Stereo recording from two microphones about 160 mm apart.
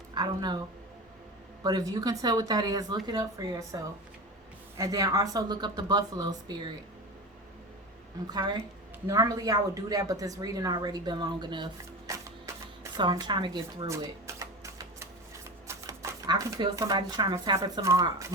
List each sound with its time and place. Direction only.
0.1 s speech: 25° right (ahead or behind)
1.6 s speech: 25° right (ahead or behind)
4.8 s speech: 20° right (ahead or behind)
8.3 s speech: 25° right (ahead or behind)
12.5 s a sound: 15° right (ahead or behind)
13.0 s speech: 30° right (ahead or behind)